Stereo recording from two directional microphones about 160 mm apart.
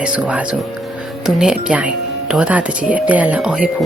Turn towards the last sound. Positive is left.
turn(degrees=-5)  # may be behind; listen again after turning